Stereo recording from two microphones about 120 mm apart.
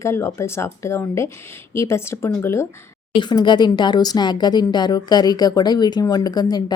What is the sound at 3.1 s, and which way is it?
Speech, 40° left (ahead or behind).